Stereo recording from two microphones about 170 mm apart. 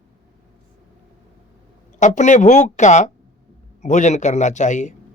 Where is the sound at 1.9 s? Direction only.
45° left (ahead or behind).